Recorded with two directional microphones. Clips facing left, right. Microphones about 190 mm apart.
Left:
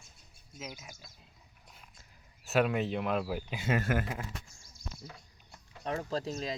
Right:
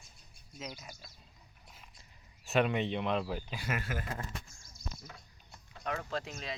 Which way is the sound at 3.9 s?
55° left (ahead or behind).